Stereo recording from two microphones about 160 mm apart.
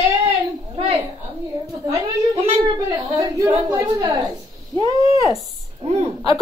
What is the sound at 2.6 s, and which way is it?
A woman's voice, 20° right (ahead or behind).